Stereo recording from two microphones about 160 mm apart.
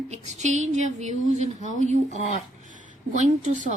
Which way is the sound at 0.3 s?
45° right (ahead or behind).